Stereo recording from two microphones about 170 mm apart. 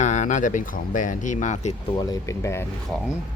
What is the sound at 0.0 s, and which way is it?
Speech, 45° left (ahead or behind).